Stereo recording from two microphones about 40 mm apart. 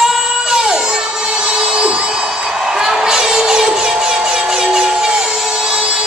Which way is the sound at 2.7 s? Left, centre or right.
Centre.